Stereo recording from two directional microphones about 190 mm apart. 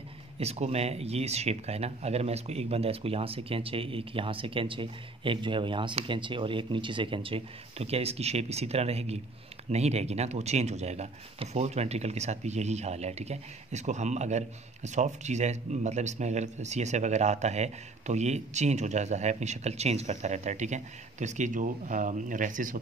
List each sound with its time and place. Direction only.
0.4 s speech: 35° right (ahead or behind)